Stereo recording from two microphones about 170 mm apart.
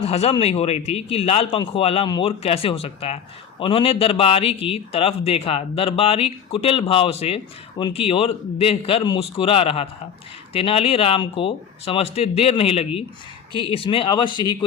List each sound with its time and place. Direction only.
0.0 s a man's voice: 40° left (ahead or behind)